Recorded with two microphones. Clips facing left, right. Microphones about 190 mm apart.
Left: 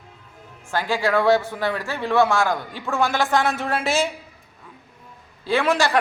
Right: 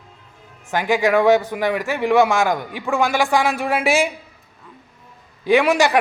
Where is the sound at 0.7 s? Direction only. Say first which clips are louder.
Right 4 dB; 15° right (ahead or behind).